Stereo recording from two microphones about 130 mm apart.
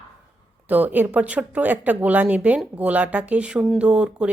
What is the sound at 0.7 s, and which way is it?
A woman's voice, 15° right (ahead or behind).